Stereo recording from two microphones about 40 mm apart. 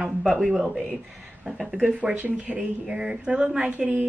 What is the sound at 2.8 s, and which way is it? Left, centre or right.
Speech, centre.